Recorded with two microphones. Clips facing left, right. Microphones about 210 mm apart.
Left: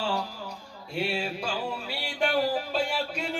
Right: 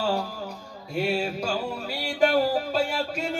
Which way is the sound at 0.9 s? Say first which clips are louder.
Right 4 dB; 40° right (ahead or behind).